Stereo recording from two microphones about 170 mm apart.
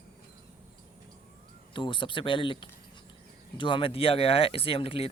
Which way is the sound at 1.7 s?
30° left (ahead or behind).